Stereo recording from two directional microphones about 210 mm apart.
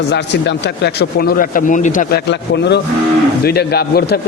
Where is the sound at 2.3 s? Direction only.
55° left (ahead or behind).